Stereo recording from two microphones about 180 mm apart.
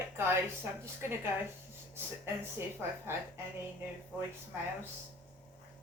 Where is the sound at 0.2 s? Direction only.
15° right (ahead or behind).